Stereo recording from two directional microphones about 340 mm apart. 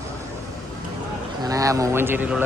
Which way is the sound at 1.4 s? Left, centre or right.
Centre.